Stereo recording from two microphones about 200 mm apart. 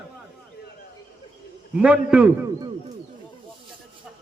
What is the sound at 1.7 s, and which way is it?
Speech, 5° right (ahead or behind).